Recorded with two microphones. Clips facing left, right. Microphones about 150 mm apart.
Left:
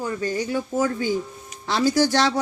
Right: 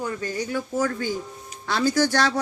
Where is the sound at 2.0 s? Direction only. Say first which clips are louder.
Left 2 dB; 20° left (ahead or behind).